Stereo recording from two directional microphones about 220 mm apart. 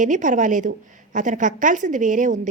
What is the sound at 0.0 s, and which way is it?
A woman's voice, 35° right (ahead or behind).